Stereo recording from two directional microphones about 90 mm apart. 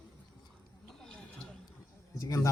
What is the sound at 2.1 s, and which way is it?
Speech, 35° left (ahead or behind).